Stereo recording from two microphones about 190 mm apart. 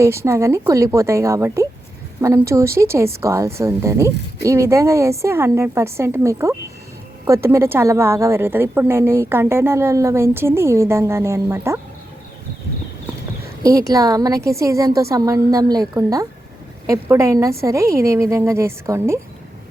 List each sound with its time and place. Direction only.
0.0 s a woman's voice: 15° right (ahead or behind)
13.6 s a woman's voice: 20° right (ahead or behind)